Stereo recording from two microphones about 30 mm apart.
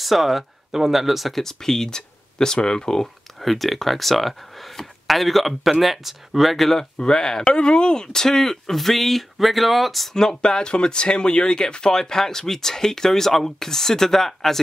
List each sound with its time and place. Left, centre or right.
0.0 s speech: centre
1.3 s speech: centre
3.3 s speech: centre
6.8 s speech: left
7.4 s speech: left; by 8.7 s centre
8.7 s speech: centre
10.1 s speech: left